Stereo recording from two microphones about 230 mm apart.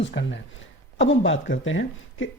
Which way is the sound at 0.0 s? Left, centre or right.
Left.